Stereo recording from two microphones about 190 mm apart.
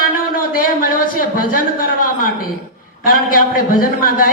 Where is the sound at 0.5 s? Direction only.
45° left (ahead or behind).